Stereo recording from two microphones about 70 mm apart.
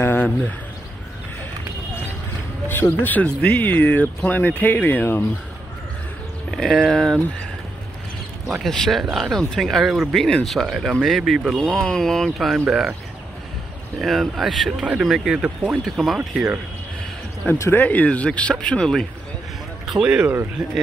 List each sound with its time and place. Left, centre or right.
0.0 s a sound: left
2.7 s speech: left
6.5 s speech: centre
8.6 s speech: centre
11.6 s speech: centre
12.5 s speech: centre
14.0 s speech: centre
17.7 s speech: left
19.9 s speech: centre